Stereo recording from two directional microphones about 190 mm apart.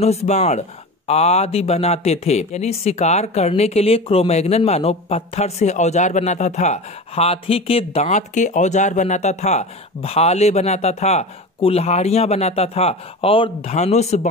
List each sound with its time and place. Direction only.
0.0 s speech: 35° left (ahead or behind)